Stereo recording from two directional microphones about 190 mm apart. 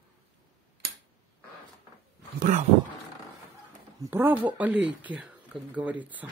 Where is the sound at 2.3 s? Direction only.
45° right (ahead or behind).